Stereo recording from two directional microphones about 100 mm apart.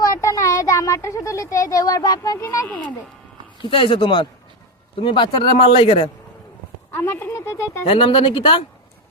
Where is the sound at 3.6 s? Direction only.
60° left (ahead or behind).